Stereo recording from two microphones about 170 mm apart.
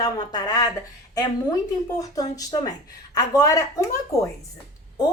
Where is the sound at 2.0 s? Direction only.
20° left (ahead or behind).